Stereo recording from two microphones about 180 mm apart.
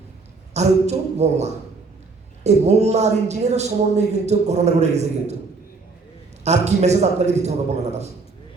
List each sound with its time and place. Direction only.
0.5 s speech: 40° right (ahead or behind)
6.4 s speech: 40° right (ahead or behind)